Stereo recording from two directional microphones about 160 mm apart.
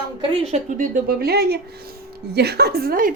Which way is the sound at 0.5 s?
60° right (ahead or behind).